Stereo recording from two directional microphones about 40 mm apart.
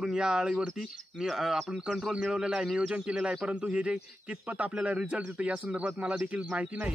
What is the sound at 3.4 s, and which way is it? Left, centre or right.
A man's voice, right.